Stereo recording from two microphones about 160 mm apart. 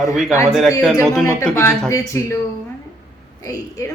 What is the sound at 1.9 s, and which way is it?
Speech, 20° left (ahead or behind).